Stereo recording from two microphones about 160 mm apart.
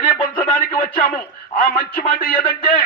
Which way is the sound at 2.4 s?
35° left (ahead or behind).